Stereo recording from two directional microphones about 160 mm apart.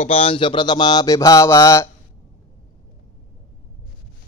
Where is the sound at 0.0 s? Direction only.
35° left (ahead or behind); by 1.9 s 20° left (ahead or behind).